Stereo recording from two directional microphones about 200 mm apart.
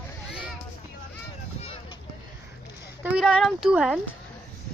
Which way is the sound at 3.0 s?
5° right (ahead or behind).